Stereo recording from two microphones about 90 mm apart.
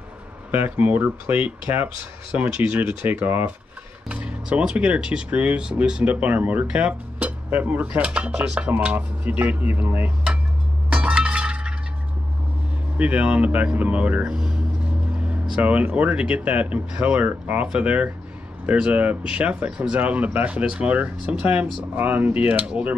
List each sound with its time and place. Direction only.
0.5 s speech: 20° right (ahead or behind)
10.9 s music: 15° right (ahead or behind)
12.9 s speech: 15° right (ahead or behind)